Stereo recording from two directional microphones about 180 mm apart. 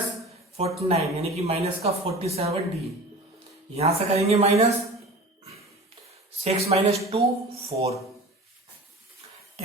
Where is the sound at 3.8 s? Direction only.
35° right (ahead or behind).